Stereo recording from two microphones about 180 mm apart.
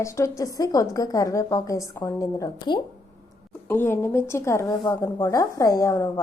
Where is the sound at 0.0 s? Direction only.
15° left (ahead or behind).